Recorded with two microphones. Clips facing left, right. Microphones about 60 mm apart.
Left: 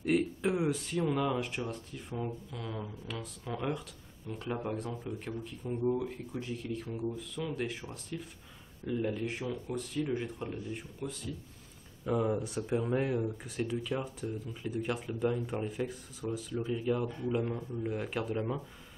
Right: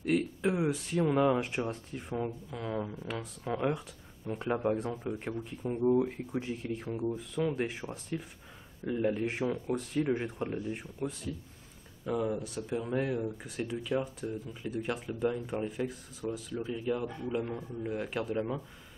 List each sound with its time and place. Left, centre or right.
0.0 s speech: centre
4.3 s speech: right
12.1 s speech: centre
13.2 s speech: centre
16.9 s speech: centre